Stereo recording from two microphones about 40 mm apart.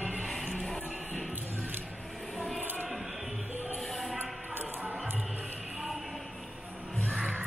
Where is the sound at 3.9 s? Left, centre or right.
Centre.